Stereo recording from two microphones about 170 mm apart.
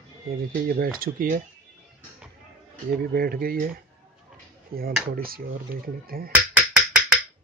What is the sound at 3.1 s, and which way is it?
Speech, 60° right (ahead or behind).